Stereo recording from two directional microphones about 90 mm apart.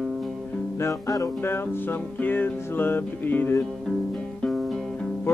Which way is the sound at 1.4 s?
25° left (ahead or behind).